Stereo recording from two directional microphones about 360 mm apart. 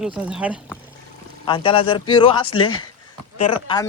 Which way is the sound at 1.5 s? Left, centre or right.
Centre.